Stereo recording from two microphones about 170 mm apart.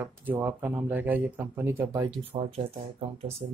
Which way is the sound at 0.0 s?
10° right (ahead or behind).